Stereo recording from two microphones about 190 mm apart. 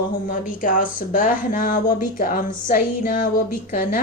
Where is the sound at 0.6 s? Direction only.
45° left (ahead or behind).